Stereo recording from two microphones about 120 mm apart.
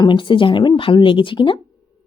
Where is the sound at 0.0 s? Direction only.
40° left (ahead or behind).